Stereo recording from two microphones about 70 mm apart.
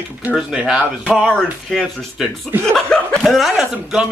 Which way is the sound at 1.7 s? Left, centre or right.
Centre.